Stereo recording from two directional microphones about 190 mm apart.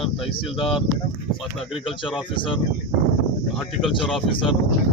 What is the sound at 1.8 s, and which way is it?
Speech, 25° left (ahead or behind).